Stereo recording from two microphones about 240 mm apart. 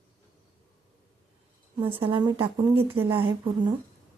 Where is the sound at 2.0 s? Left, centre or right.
Right.